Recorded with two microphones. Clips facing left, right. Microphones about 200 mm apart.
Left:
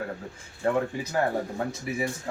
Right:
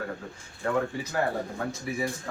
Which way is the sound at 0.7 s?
25° left (ahead or behind).